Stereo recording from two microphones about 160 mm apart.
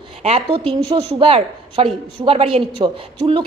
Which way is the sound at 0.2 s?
40° right (ahead or behind).